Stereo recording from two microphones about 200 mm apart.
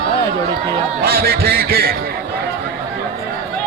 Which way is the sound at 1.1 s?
50° right (ahead or behind).